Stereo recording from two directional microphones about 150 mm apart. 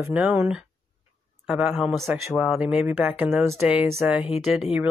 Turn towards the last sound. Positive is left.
turn(degrees=-5)  # may be behind; listen again after turning